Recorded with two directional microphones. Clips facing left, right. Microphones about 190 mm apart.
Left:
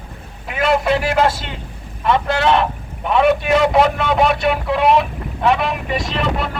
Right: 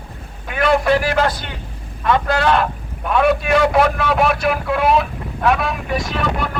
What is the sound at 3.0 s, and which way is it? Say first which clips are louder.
A man's voice: left 1 dB; centre (ahead or behind).